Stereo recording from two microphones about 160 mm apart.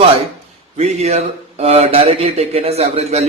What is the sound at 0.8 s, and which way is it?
Speech, 45° right (ahead or behind).